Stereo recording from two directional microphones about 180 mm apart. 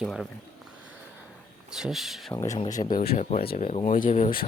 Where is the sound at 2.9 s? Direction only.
60° left (ahead or behind).